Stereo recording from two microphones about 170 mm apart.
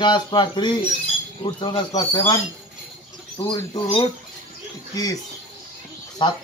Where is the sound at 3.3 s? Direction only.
25° left (ahead or behind).